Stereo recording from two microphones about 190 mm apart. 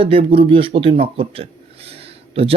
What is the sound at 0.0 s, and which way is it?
A man's voice, 30° right (ahead or behind).